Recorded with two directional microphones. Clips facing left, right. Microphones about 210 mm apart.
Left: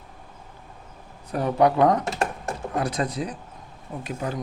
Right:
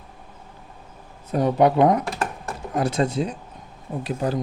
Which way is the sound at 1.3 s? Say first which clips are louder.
Right 2 dB; 20° right (ahead or behind).